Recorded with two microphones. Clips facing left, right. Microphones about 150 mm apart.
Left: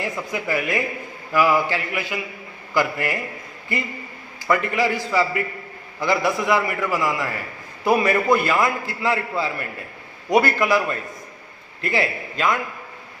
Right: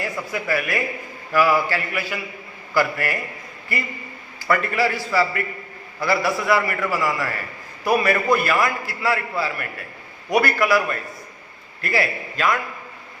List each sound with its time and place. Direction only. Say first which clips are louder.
0.0 s a man's voice: even; 20° left (ahead or behind)